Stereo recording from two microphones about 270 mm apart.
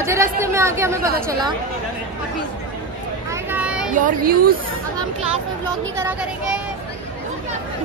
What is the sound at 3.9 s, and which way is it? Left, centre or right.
Speech, right.